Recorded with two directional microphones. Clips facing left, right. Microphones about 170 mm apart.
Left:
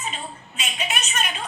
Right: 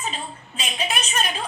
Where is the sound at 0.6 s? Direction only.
30° right (ahead or behind).